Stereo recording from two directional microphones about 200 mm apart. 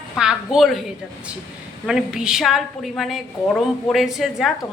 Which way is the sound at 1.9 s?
5° right (ahead or behind).